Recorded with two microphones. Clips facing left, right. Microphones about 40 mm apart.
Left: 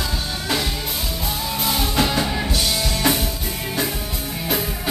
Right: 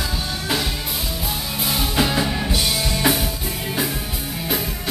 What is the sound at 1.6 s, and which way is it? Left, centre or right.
Music, centre.